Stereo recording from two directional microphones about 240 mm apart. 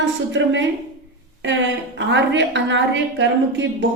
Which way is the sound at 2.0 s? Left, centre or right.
Right.